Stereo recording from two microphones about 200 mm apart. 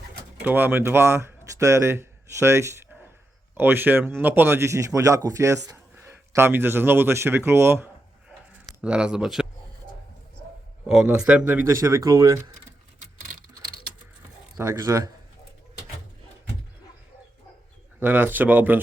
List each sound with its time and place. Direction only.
0.4 s speech: 10° right (ahead or behind)
10.8 s speech: 5° right (ahead or behind)
14.5 s speech: 15° right (ahead or behind)
18.0 s speech: 10° right (ahead or behind)